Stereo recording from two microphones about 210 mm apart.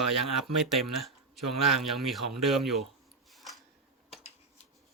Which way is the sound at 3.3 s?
Centre (ahead or behind).